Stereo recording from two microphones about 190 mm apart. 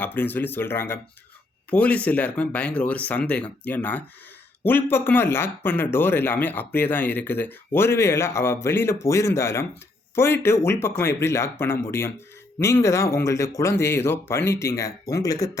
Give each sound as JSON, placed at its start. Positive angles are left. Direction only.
{"t": 0.0, "sound": "speech", "side_deg": 10}